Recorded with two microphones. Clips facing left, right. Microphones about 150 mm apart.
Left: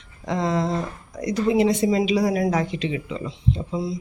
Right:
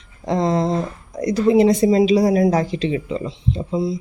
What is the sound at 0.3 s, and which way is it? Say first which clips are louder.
Speech: right 4 dB; 35° right (ahead or behind).